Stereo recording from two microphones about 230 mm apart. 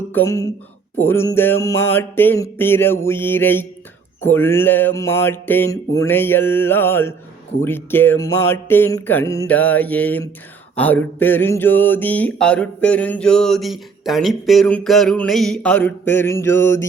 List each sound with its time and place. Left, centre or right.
0.1 s speech: centre
0.9 s mantra: centre
10.8 s a sound: centre